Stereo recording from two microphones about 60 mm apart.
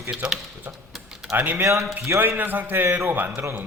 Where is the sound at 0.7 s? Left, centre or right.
Right.